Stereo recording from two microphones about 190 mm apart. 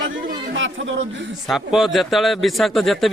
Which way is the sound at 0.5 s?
85° right.